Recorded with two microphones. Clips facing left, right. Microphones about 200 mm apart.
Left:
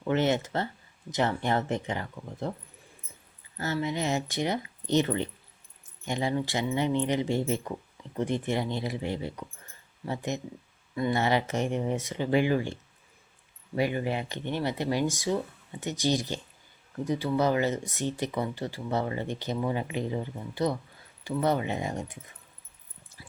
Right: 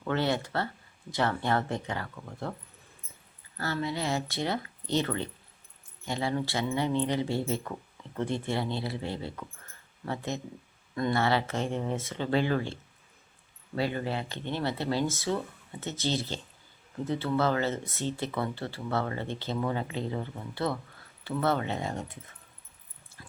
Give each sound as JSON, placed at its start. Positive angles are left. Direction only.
{"t": 0.0, "sound": "speech", "side_deg": 20}
{"t": 3.6, "sound": "speech", "side_deg": 20}